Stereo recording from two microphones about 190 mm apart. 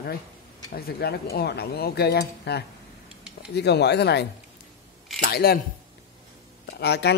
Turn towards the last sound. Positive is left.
turn(degrees=60)  # may be behind; listen again after turning